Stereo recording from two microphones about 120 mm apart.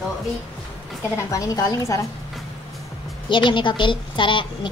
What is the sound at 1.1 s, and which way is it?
Speech, 30° left (ahead or behind).